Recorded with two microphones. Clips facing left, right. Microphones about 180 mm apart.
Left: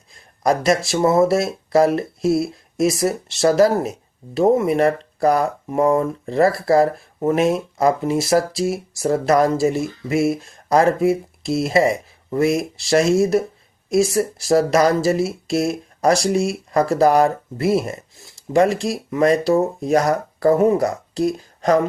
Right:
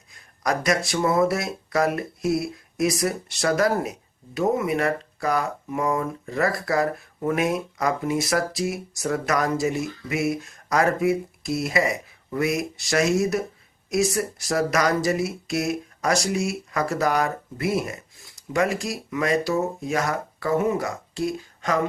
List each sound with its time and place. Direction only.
0.1 s speech: 30° left (ahead or behind)